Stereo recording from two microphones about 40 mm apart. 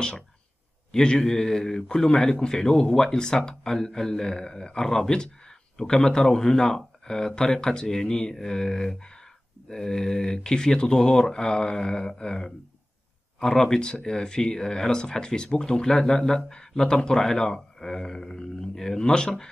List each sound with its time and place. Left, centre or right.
0.9 s a man's voice: left